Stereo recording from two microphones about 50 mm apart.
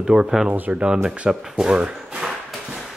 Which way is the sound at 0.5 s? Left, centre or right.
Right.